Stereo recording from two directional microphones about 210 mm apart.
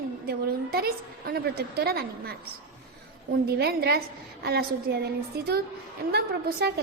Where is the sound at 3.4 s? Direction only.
50° right (ahead or behind).